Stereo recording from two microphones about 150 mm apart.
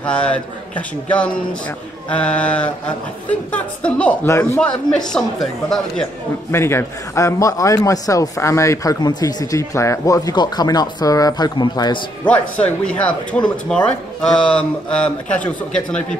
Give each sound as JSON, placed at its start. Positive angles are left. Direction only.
{"t": 0.0, "sound": "a woman's voice", "side_deg": 5}
{"t": 6.5, "sound": "a man's voice", "side_deg": 15}
{"t": 12.3, "sound": "speech", "side_deg": 10}